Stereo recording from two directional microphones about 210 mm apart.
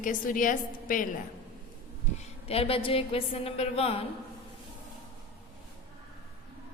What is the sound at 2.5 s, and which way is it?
A woman's voice, 25° left (ahead or behind).